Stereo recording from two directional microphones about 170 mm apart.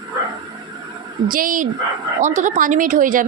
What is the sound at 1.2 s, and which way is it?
Speech, 55° right (ahead or behind).